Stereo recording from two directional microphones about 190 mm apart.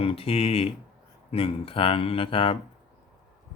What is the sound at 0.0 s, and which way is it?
Speech, 30° left (ahead or behind).